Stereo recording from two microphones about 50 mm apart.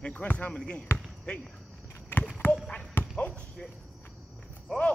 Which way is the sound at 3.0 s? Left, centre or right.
Left.